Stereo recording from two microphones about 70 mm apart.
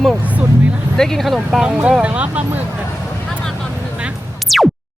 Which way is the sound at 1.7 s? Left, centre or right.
Centre.